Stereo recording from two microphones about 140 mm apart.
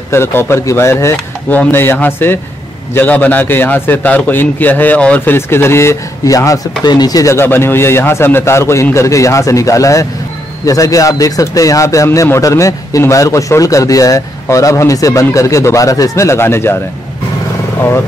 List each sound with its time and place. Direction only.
0.1 s a man's voice: 15° left (ahead or behind)